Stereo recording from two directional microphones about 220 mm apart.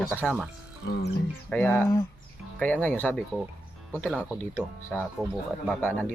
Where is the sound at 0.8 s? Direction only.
55° left (ahead or behind).